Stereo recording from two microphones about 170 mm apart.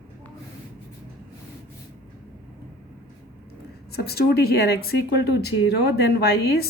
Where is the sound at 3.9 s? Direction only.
70° left (ahead or behind).